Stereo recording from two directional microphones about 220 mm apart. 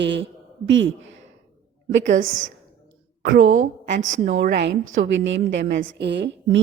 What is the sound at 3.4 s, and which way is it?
Speech, 65° right (ahead or behind).